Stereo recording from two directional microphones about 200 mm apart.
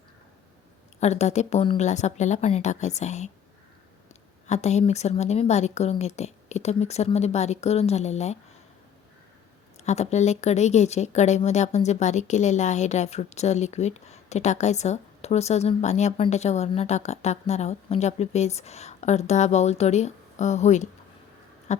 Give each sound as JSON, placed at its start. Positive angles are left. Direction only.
{"t": 0.9, "sound": "speech", "side_deg": 35}
{"t": 4.4, "sound": "speech", "side_deg": 35}
{"t": 9.8, "sound": "speech", "side_deg": 35}
{"t": 21.7, "sound": "a sound", "side_deg": 35}